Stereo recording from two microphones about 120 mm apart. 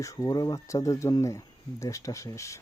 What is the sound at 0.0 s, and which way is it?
Speech, 25° left (ahead or behind).